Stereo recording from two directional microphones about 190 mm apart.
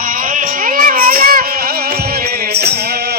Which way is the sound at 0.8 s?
50° right (ahead or behind).